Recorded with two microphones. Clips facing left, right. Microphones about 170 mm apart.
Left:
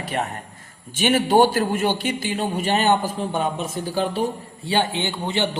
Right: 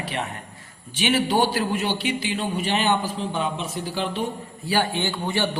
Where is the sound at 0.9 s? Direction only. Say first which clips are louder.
Left 4 dB; 50° left (ahead or behind).